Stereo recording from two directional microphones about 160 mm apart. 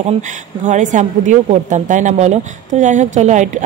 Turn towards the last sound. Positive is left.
turn(degrees=-45)  # may be behind; listen again after turning